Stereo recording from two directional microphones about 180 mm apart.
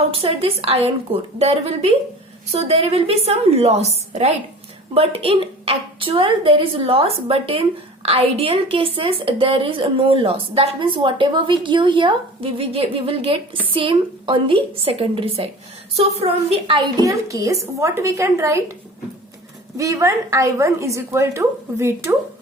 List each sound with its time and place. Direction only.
0.1 s a woman's voice: 35° right (ahead or behind); by 18.6 s 15° right (ahead or behind)
19.7 s a woman's voice: 15° right (ahead or behind)